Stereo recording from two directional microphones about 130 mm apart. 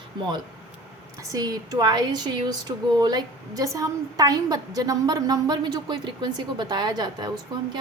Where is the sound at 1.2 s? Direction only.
25° right (ahead or behind).